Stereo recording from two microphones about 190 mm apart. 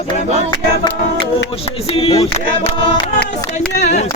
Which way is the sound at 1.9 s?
30° left (ahead or behind).